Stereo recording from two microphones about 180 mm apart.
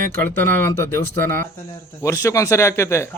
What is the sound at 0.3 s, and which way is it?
Speech, 10° left (ahead or behind).